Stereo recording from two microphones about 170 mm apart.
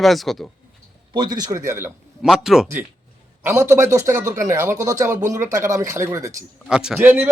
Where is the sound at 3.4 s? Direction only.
15° right (ahead or behind).